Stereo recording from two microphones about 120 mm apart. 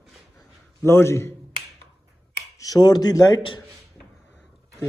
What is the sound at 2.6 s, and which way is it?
Speech, 35° left (ahead or behind).